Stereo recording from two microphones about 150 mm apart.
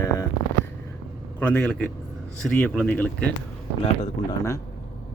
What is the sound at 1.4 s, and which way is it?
Speech, 15° left (ahead or behind).